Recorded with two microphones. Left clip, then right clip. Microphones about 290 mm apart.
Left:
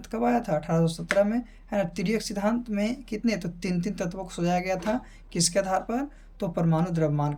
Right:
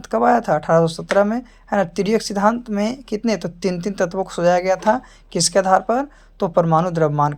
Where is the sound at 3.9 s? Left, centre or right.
Right.